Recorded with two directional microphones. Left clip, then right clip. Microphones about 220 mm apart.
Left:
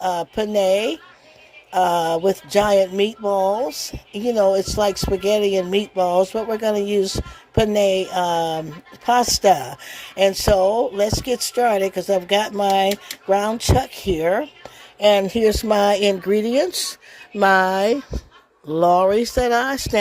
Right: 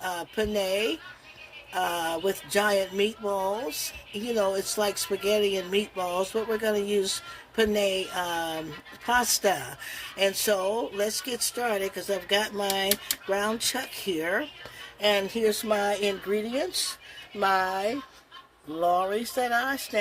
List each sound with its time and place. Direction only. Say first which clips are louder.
0.0 s speech: left 8 dB; 35° left (ahead or behind)